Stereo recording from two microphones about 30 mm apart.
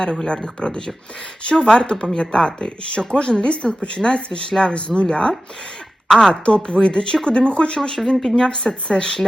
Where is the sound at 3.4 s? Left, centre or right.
Left.